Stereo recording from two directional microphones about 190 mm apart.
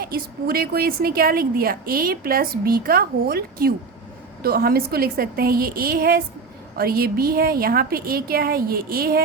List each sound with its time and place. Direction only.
0.0 s a woman's voice: 50° right (ahead or behind)